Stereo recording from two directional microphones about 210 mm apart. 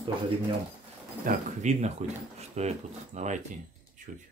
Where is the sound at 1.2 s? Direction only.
35° right (ahead or behind).